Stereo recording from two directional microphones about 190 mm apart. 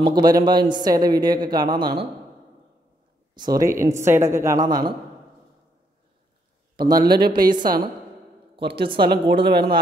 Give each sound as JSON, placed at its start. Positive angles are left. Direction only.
{"t": 0.0, "sound": "speech", "side_deg": -20}
{"t": 3.3, "sound": "a woman's voice", "side_deg": -20}
{"t": 6.8, "sound": "speech", "side_deg": -20}
{"t": 7.1, "sound": "speech", "side_deg": -55}
{"t": 7.5, "sound": "speech", "side_deg": -20}
{"t": 9.5, "sound": "speech", "side_deg": -55}